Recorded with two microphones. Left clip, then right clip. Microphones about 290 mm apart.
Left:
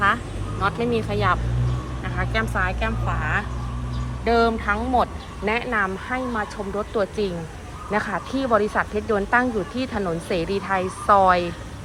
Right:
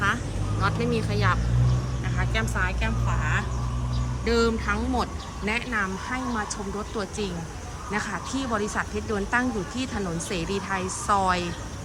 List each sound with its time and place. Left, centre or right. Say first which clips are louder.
0.6 s speech: left 4 dB; centre
2.1 s speech: left 4 dB; centre